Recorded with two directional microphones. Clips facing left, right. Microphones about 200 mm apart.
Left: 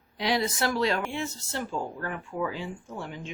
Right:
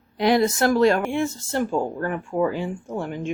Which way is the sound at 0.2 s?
50° right (ahead or behind).